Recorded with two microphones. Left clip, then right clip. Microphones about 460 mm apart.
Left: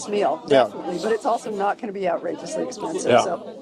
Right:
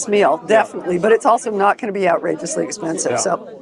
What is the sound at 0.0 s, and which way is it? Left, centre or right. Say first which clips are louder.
Speech: right 7 dB; centre.